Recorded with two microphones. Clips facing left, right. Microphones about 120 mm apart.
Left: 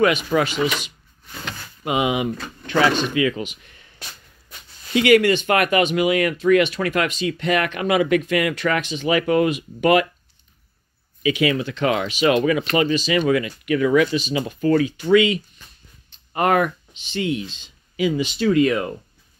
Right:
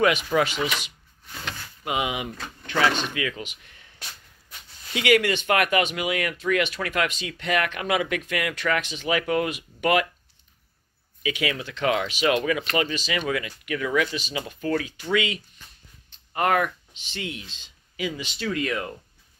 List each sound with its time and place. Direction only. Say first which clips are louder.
0.3 s speech: left 3 dB; 5° left (ahead or behind)
1.9 s speech: left 7 dB; 10° left (ahead or behind)
4.9 s speech: left 6 dB; 10° right (ahead or behind); by 8.8 s 5° left (ahead or behind)
8.8 s speech: left 5 dB; 5° right (ahead or behind)
11.2 s speech: left 8 dB; centre (ahead or behind)
13.7 s speech: left 8 dB; 10° left (ahead or behind)
14.1 s speech: left 8 dB; 5° right (ahead or behind)
14.4 s speech: left 8 dB; 10° left (ahead or behind)
17.9 s speech: left 10 dB; 10° left (ahead or behind)